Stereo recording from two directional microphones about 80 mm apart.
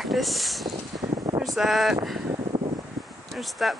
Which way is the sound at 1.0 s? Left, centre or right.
Right.